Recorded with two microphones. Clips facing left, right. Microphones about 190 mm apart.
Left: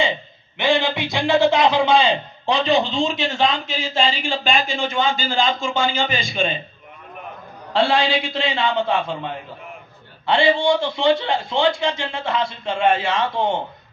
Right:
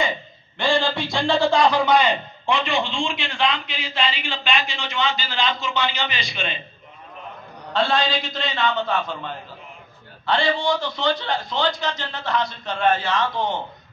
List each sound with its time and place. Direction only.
0.6 s a man's voice: 20° left (ahead or behind); by 6.4 s 50° left (ahead or behind)
7.7 s a man's voice: 30° left (ahead or behind)